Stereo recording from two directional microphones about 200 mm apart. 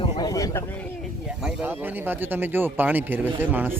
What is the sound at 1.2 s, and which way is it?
Speech, 5° right (ahead or behind).